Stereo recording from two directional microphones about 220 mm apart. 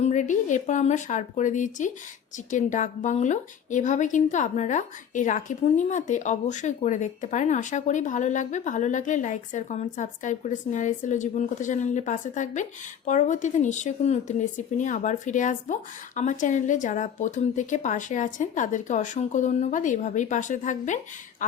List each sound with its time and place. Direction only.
0.0 s speech: 35° left (ahead or behind)